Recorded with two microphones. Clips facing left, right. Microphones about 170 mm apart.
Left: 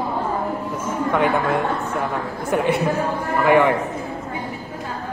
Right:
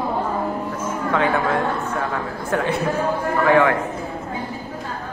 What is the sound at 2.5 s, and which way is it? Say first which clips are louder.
Speech: left 2 dB; 15° left (ahead or behind).